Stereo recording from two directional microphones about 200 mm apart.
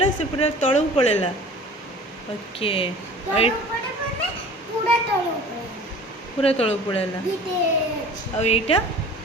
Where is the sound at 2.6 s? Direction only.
25° left (ahead or behind).